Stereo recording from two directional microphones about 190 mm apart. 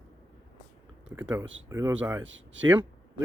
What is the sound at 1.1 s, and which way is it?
Speech, 10° right (ahead or behind).